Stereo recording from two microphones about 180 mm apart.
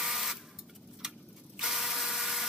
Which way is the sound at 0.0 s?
Centre (ahead or behind).